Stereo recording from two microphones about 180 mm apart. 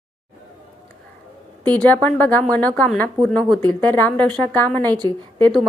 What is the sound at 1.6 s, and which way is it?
A woman's voice, 10° left (ahead or behind).